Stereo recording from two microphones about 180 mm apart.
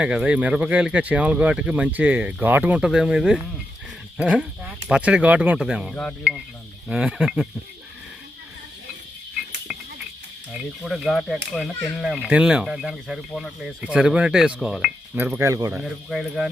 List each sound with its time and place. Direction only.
0.0 s speech: 5° right (ahead or behind)
9.7 s a sound: centre (ahead or behind)
10.5 s speech: centre (ahead or behind)
15.2 s speech: 15° right (ahead or behind)
15.7 s speech: centre (ahead or behind)